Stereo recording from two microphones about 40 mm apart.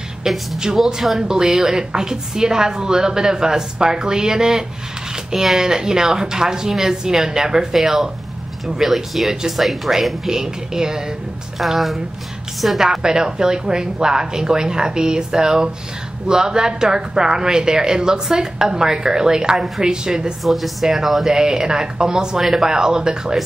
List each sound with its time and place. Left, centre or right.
1.2 s speech: centre
11.5 s speech: centre
20.4 s speech: centre
21.3 s speech: centre